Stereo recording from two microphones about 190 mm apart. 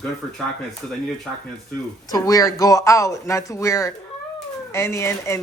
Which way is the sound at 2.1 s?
20° left (ahead or behind).